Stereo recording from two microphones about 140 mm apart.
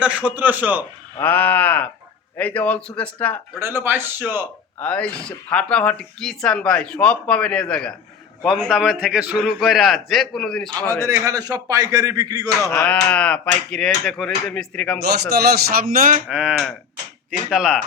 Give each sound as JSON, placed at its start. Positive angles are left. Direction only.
{"t": 0.0, "sound": "a man's voice", "side_deg": -10}
{"t": 1.2, "sound": "speech", "side_deg": 15}
{"t": 3.6, "sound": "a man's voice", "side_deg": -15}
{"t": 4.8, "sound": "a man's voice", "side_deg": 10}
{"t": 11.0, "sound": "a man's voice", "side_deg": -25}
{"t": 12.7, "sound": "speech", "side_deg": 10}
{"t": 15.4, "sound": "speech", "side_deg": -90}
{"t": 16.3, "sound": "a man's voice", "side_deg": -10}